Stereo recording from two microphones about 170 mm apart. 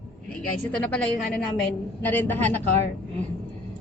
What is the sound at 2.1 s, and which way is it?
Speech, 10° left (ahead or behind).